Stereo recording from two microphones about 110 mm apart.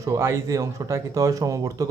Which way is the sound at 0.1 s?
25° right (ahead or behind).